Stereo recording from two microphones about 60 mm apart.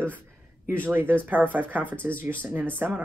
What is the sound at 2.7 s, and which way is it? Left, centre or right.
Speech, right.